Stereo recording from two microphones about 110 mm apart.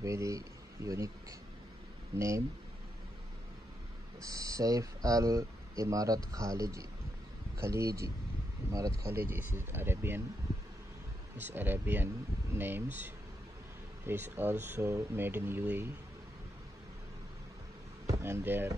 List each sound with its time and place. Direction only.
0.0 s speech: 30° right (ahead or behind)
2.1 s speech: 30° right (ahead or behind)
4.2 s speech: 30° right (ahead or behind)
11.3 s speech: 20° right (ahead or behind)
18.0 s speech: 25° right (ahead or behind)